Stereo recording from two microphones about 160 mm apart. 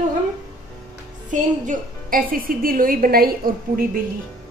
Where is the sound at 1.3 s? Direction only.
60° right (ahead or behind).